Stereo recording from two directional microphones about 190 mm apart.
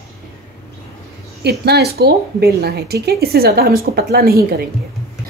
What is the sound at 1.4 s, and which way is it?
Speech, 60° right (ahead or behind).